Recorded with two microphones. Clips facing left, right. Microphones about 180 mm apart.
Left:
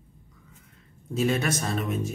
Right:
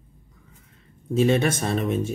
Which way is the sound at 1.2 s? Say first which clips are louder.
Right 5 dB; 25° right (ahead or behind).